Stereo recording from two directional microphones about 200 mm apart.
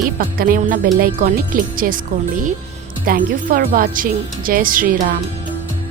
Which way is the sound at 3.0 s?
45° right (ahead or behind).